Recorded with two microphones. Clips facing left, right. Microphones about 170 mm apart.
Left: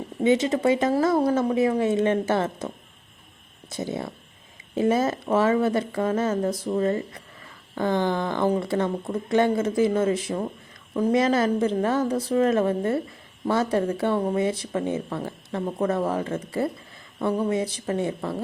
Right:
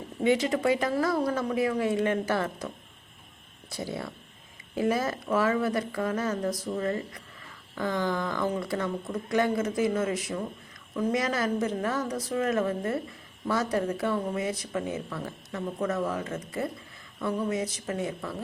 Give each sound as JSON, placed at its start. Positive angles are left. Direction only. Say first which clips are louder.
{"t": 0.2, "sound": "speech", "louder": "left 4 dB", "side_deg": 25}
{"t": 3.7, "sound": "speech", "louder": "left 5 dB", "side_deg": 20}